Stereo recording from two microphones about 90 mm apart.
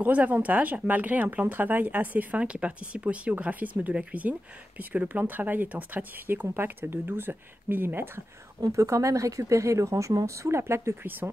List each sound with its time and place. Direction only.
0.0 s speech: 20° right (ahead or behind)
8.5 s speech: 40° right (ahead or behind)